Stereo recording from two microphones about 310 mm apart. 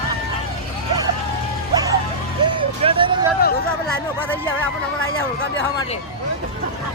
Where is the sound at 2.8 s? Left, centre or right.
Centre.